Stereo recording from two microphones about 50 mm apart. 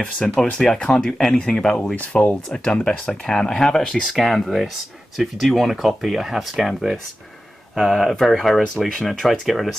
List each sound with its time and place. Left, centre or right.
0.0 s speech: centre
2.0 s speech: left
2.5 s speech: centre
4.0 s speech: centre
7.7 s speech: centre